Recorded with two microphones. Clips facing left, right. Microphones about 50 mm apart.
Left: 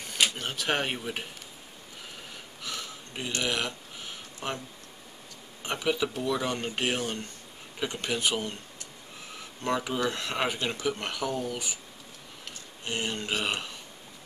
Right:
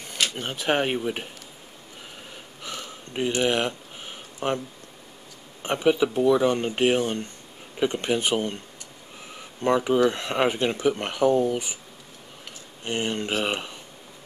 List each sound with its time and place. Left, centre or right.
0.4 s speech: centre
2.6 s a sound: right
5.6 s speech: right
9.6 s speech: right
12.8 s speech: right
13.3 s speech: centre